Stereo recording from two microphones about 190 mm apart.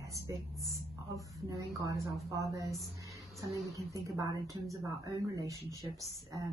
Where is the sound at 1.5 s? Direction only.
15° right (ahead or behind).